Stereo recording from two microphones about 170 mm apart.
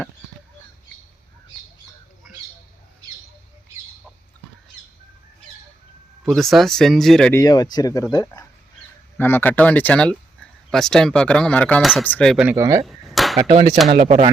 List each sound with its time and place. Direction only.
6.2 s speech: centre (ahead or behind)
7.3 s speech: 20° left (ahead or behind)
12.4 s speech: 15° right (ahead or behind)
12.8 s a sound: centre (ahead or behind)
14.0 s speech: 40° right (ahead or behind)